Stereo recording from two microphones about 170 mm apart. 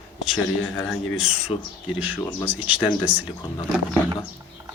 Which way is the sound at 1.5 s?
30° left (ahead or behind).